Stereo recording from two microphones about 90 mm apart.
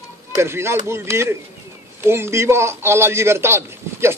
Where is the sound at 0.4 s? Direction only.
30° right (ahead or behind).